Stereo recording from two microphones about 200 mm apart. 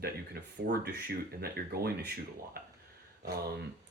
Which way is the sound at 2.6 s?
50° right (ahead or behind).